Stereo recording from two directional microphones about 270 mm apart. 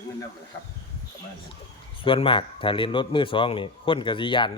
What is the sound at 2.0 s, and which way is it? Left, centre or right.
A man's voice, centre.